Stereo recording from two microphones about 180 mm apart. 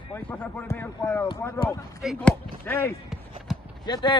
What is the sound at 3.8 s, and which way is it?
Speech, 25° left (ahead or behind).